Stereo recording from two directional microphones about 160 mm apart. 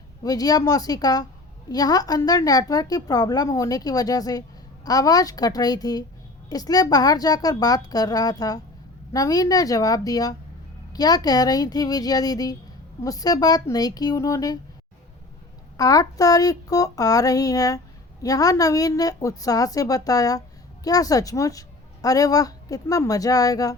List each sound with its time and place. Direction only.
0.2 s a woman's voice: 25° left (ahead or behind)
15.8 s a woman's voice: 20° left (ahead or behind)